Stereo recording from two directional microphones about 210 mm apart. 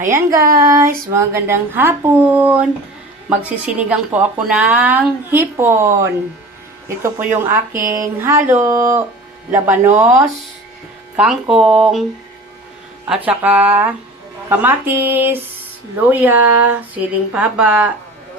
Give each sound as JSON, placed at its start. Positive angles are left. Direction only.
{"t": 0.1, "sound": "speech", "side_deg": -15}
{"t": 0.4, "sound": "a sound", "side_deg": -45}
{"t": 1.1, "sound": "speech", "side_deg": -10}
{"t": 3.8, "sound": "speech", "side_deg": -5}
{"t": 13.1, "sound": "speech", "side_deg": -5}